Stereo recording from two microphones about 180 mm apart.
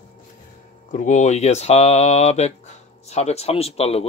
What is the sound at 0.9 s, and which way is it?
Speech, 40° left (ahead or behind).